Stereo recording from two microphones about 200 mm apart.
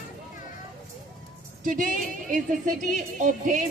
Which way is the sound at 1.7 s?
45° right (ahead or behind).